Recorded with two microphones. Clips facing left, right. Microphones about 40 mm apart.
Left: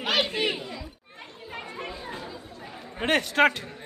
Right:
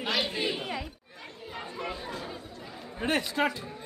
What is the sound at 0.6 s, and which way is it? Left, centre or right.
Chatter, right.